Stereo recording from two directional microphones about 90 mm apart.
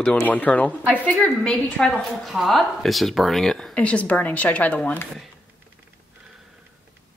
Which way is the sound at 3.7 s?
15° left (ahead or behind).